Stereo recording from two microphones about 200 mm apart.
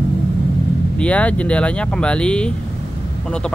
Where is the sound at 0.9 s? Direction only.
5° left (ahead or behind).